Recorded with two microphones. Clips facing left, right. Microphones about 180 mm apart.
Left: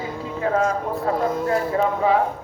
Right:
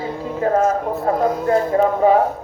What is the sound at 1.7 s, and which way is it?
Speech, 45° right (ahead or behind).